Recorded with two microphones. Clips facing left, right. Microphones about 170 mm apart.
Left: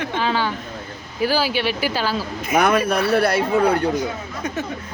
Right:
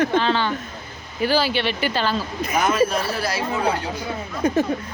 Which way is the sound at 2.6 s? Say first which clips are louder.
Left 2 dB; 60° left (ahead or behind).